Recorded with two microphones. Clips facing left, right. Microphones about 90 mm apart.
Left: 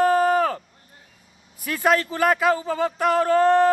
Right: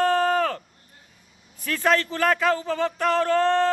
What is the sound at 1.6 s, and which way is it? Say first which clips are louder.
A man's voice: left 1 dB; 15° left (ahead or behind).